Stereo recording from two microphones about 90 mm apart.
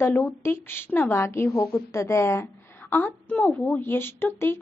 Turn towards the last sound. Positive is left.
turn(degrees=25)  # may be behind; listen again after turning